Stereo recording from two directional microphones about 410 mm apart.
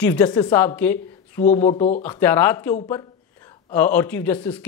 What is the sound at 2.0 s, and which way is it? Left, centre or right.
Speech, centre.